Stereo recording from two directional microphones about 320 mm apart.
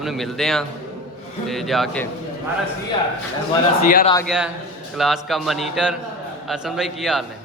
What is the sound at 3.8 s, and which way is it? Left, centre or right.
Speech, left.